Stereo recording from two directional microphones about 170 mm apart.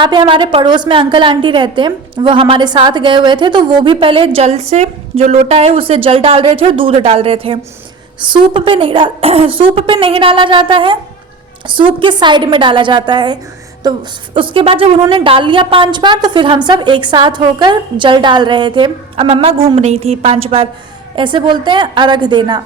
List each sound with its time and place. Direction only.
0.0 s a woman's voice: 25° right (ahead or behind)